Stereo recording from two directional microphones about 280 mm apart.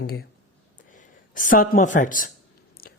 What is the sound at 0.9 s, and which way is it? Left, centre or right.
Speech, left.